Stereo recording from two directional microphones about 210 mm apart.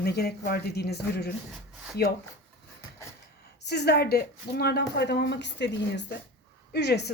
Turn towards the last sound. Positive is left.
turn(degrees=55)  # may be behind; listen again after turning